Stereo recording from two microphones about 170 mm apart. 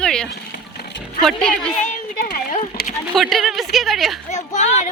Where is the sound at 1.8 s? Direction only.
55° left (ahead or behind).